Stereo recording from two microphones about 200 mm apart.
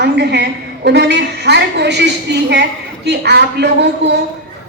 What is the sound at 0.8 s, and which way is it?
A woman's voice, 55° right (ahead or behind).